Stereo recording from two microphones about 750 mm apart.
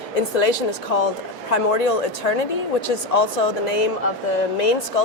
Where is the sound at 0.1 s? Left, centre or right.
Left.